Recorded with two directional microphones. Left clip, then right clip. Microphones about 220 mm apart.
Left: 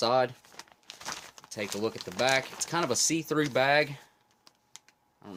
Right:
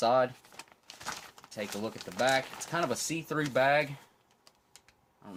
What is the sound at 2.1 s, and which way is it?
Speech, 45° left (ahead or behind).